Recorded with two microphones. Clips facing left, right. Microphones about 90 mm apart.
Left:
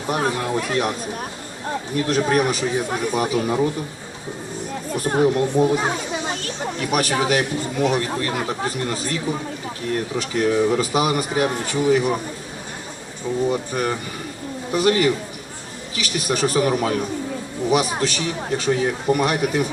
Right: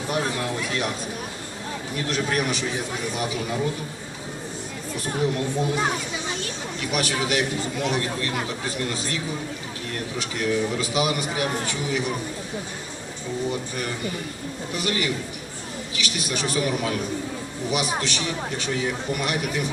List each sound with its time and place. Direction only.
0.1 s a man's voice: 45° left (ahead or behind)
2.0 s a man's voice: 45° left (ahead or behind)
4.9 s a man's voice: 50° left (ahead or behind)
10.2 s a man's voice: 45° left (ahead or behind)
13.5 s a man's voice: 45° left (ahead or behind)